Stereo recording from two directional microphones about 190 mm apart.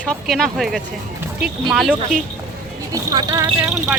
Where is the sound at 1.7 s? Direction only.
Centre (ahead or behind).